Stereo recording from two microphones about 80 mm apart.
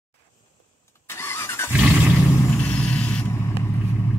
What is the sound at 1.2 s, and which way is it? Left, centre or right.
Vehicle, left.